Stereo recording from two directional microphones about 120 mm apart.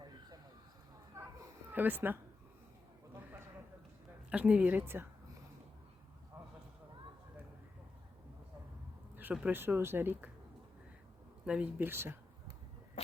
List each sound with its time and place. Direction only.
1.2 s a sound: 25° right (ahead or behind)
1.7 s speech: 15° right (ahead or behind)
4.3 s speech: 10° right (ahead or behind)
9.3 s speech: 15° right (ahead or behind)
11.4 s speech: 10° right (ahead or behind)